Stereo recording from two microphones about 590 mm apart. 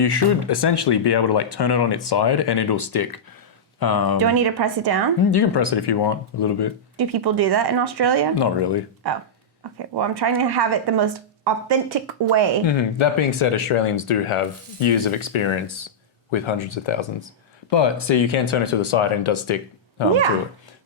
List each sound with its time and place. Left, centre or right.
0.0 s speech: left
4.2 s speech: right
5.3 s speech: left
7.0 s speech: right
8.4 s speech: left
9.7 s speech: right
12.6 s speech: left